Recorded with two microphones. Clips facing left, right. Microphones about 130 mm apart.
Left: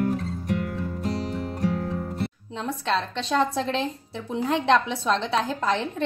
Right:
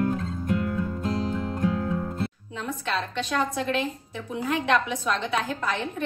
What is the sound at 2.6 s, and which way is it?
A woman's voice, 30° left (ahead or behind).